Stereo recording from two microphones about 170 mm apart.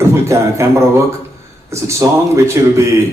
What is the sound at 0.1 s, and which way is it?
A man's voice, 15° right (ahead or behind).